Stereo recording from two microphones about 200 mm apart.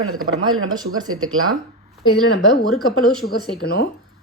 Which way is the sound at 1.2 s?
90° right.